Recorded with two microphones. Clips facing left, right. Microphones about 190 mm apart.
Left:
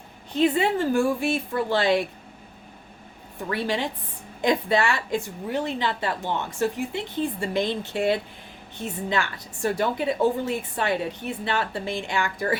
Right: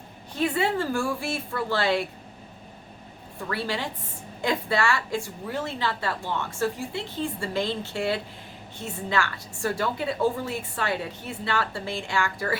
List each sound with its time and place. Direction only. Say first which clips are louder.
0.3 s a woman's voice: left 4 dB; 20° left (ahead or behind)
3.5 s a woman's voice: left 4 dB; 20° left (ahead or behind)